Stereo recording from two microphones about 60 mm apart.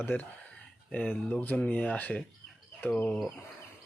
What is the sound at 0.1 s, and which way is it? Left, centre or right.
Speech, left.